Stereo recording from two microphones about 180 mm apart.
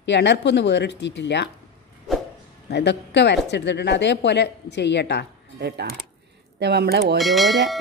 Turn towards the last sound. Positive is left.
turn(degrees=0)  # may be behind; listen again after turning